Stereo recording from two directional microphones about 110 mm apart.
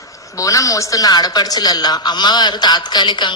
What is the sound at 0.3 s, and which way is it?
A woman's voice, 30° left (ahead or behind).